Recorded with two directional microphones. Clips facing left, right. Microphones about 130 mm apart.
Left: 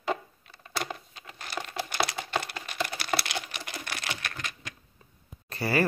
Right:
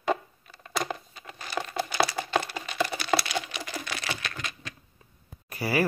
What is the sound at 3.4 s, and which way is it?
Typing, 50° left (ahead or behind).